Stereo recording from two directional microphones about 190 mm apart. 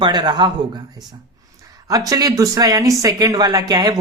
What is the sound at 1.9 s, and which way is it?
Speech, 20° right (ahead or behind).